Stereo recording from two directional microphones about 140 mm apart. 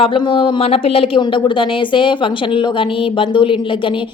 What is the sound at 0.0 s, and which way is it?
Speech, 35° left (ahead or behind).